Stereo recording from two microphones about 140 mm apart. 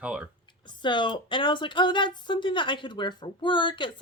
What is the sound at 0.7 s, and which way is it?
A woman's voice, 35° left (ahead or behind).